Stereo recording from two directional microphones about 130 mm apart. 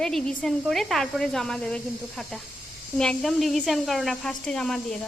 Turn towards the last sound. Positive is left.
turn(degrees=5)  # may be behind; listen again after turning